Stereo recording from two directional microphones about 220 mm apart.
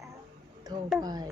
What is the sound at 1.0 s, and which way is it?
Speech, 15° right (ahead or behind).